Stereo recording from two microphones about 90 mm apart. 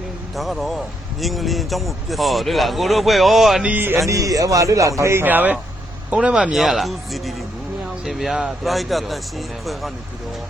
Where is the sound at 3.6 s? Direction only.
20° right (ahead or behind).